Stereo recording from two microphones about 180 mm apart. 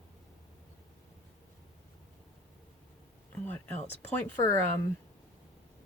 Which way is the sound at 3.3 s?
10° left (ahead or behind).